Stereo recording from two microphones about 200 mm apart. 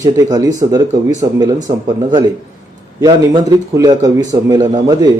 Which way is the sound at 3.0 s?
20° right (ahead or behind).